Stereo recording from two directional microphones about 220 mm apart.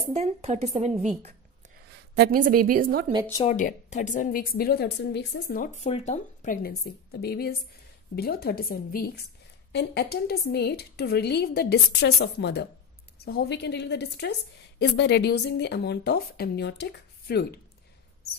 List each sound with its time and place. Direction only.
0.1 s a woman's voice: 30° right (ahead or behind)
0.9 s a woman's voice: centre (ahead or behind)
2.1 s a woman's voice: 40° right (ahead or behind)
3.4 s a woman's voice: 35° left (ahead or behind)